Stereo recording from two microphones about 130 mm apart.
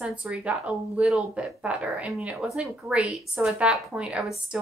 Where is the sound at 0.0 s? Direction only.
5° right (ahead or behind).